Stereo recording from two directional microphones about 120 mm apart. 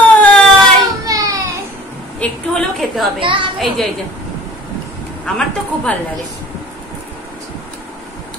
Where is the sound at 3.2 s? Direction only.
45° right (ahead or behind).